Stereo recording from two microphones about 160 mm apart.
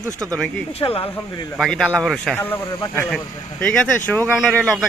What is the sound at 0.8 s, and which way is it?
Speech, 35° left (ahead or behind).